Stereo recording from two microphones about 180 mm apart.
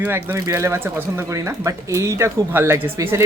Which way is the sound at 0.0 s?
10° right (ahead or behind).